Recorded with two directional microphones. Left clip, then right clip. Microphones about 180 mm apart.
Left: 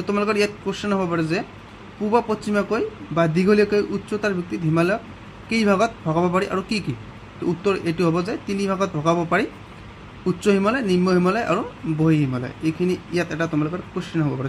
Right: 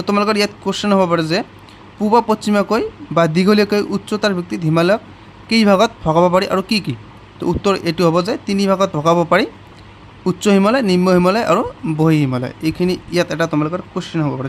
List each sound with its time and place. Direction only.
0.0 s speech: 40° right (ahead or behind)